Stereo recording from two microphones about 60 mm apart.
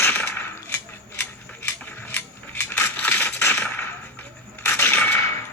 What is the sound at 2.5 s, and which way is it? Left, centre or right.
Coin, left.